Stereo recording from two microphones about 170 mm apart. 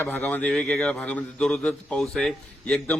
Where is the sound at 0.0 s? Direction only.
10° left (ahead or behind).